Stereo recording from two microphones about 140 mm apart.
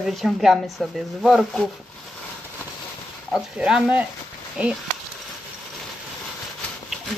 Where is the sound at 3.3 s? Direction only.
5° right (ahead or behind).